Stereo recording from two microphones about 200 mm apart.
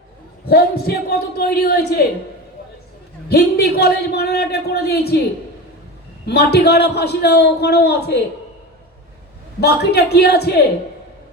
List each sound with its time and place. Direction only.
0.4 s a man's voice: 50° left (ahead or behind)
3.2 s a man's voice: 50° left (ahead or behind)
6.2 s a man's voice: 55° left (ahead or behind)
9.6 s a man's voice: 55° left (ahead or behind)